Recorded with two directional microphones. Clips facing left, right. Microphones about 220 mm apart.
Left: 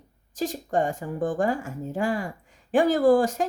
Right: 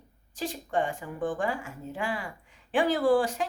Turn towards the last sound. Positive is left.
turn(degrees=45)  # may be behind; listen again after turning